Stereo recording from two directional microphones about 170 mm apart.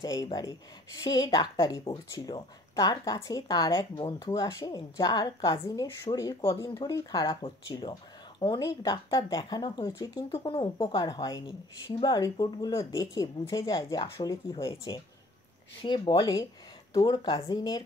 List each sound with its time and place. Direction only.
0.0 s speech: 20° left (ahead or behind)
10.3 s speech: 30° left (ahead or behind)